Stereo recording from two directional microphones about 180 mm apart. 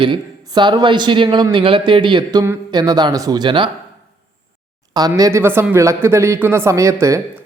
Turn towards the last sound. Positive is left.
turn(degrees=-15)  # may be behind; listen again after turning